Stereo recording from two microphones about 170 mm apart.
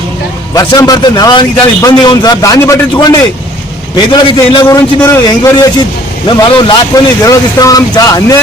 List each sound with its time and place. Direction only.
0.5 s a man's voice: 20° left (ahead or behind)
4.6 s a man's voice: 15° left (ahead or behind)
6.2 s a man's voice: 30° left (ahead or behind)